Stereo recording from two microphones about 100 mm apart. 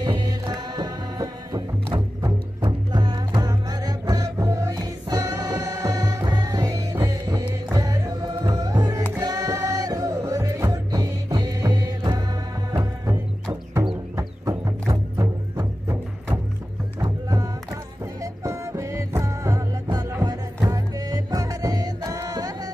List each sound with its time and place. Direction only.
0.0 s music: 45° right (ahead or behind)
2.6 s music: 50° right (ahead or behind)
13.0 s music: 30° right (ahead or behind)
18.2 s music: 30° right (ahead or behind)